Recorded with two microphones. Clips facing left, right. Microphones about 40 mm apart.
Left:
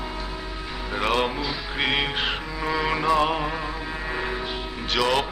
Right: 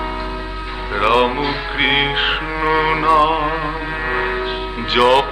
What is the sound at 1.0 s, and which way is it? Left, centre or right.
Music, right.